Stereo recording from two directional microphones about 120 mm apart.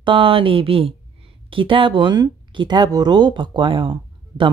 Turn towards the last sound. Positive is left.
turn(degrees=-45)  # may be behind; listen again after turning